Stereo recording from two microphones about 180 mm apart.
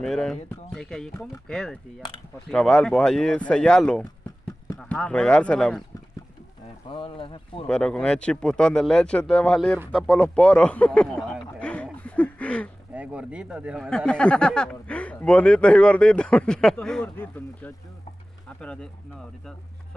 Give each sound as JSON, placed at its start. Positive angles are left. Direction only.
{"t": 0.0, "sound": "speech", "side_deg": 5}
{"t": 6.9, "sound": "speech", "side_deg": 30}
{"t": 7.6, "sound": "speech", "side_deg": 5}
{"t": 12.9, "sound": "speech", "side_deg": -5}
{"t": 13.8, "sound": "speech", "side_deg": 5}